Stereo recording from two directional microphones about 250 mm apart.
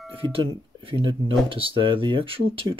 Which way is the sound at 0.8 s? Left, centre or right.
Right.